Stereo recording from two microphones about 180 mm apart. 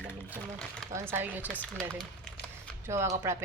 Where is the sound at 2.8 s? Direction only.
15° right (ahead or behind).